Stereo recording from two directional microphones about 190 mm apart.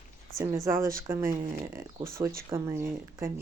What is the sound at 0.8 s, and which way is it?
Speech, 45° right (ahead or behind).